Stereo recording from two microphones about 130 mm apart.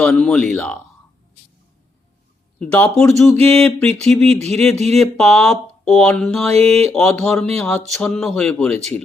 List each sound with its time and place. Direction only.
0.0 s speech: 5° left (ahead or behind)
2.6 s speech: 10° left (ahead or behind)
4.3 s speech: 55° right (ahead or behind)
4.9 s speech: 5° left (ahead or behind)